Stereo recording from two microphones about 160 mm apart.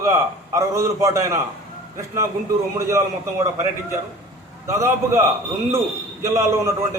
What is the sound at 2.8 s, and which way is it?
Speech, 20° right (ahead or behind).